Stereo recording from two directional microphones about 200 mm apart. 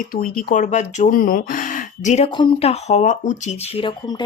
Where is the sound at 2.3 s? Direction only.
25° left (ahead or behind).